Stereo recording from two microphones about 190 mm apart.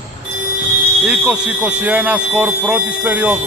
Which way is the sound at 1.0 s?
5° right (ahead or behind).